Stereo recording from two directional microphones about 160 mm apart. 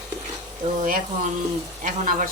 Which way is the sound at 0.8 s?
60° right (ahead or behind).